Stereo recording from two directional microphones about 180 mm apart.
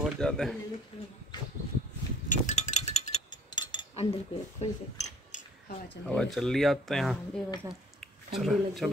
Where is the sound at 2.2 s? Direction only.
45° left (ahead or behind).